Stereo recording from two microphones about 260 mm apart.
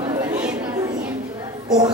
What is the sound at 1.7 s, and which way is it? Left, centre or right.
Music, centre.